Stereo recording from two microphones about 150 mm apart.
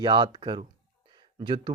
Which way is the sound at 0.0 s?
30° right (ahead or behind).